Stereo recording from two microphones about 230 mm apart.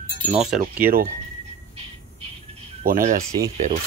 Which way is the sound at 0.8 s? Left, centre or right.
Right.